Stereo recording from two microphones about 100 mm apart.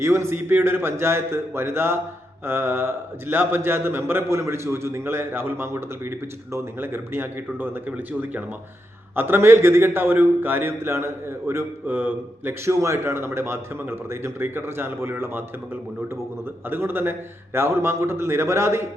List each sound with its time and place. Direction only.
0.0 s a man's voice: 25° right (ahead or behind)
16.6 s a man's voice: 20° right (ahead or behind)